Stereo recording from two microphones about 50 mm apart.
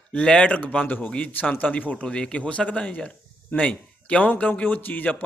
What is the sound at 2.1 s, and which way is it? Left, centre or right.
A man's voice, left.